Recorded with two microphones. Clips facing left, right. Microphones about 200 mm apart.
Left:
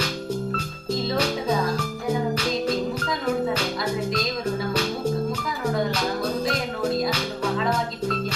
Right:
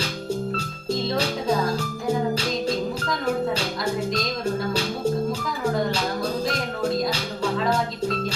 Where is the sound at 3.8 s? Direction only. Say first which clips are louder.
Even; centre (ahead or behind).